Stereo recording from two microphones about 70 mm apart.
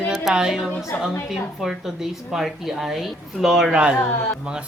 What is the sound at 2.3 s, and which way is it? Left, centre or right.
A woman's voice, centre.